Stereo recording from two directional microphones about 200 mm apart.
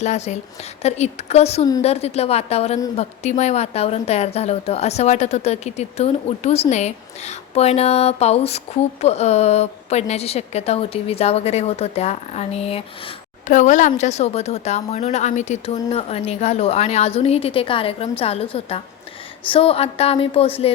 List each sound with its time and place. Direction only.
0.0 s a woman's voice: 35° left (ahead or behind)